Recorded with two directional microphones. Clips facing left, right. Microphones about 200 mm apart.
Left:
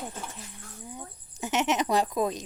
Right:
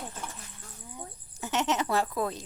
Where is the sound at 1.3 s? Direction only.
15° left (ahead or behind).